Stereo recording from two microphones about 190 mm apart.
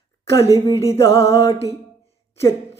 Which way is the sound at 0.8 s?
15° left (ahead or behind).